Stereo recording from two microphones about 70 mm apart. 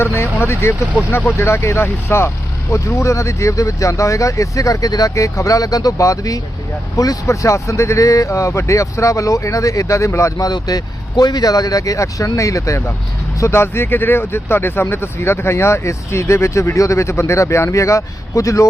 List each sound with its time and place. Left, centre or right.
0.0 s speech: left
10.4 s speech: left
13.4 s speech: left